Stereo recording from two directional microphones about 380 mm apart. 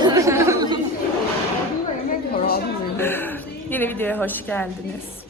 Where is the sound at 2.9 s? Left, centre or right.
Centre.